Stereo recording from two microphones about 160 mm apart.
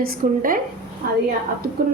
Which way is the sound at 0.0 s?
65° right (ahead or behind).